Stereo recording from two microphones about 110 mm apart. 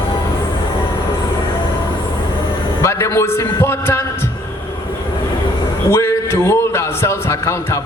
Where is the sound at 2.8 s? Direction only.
25° left (ahead or behind).